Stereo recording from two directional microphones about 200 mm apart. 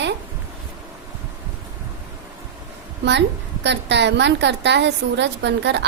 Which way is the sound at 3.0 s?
60° right (ahead or behind).